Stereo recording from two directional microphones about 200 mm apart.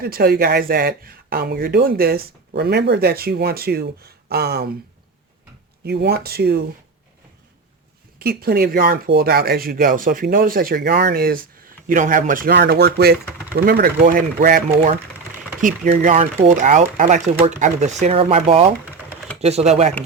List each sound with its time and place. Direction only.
0.0 s speech: 50° right (ahead or behind)
5.8 s speech: 55° right (ahead or behind)
8.2 s speech: 50° right (ahead or behind); by 19.9 s 35° right (ahead or behind)